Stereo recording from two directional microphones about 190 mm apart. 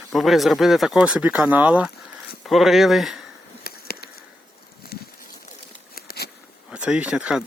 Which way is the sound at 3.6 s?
55° left (ahead or behind).